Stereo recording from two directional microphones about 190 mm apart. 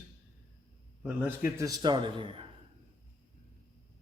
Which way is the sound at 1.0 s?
10° right (ahead or behind).